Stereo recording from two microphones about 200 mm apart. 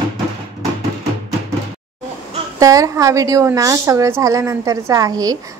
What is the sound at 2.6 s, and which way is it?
A woman's voice, 15° right (ahead or behind).